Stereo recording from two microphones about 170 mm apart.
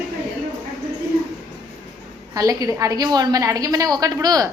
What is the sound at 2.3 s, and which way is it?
A woman's voice, 20° right (ahead or behind).